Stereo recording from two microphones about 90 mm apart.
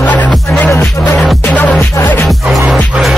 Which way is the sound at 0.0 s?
15° left (ahead or behind).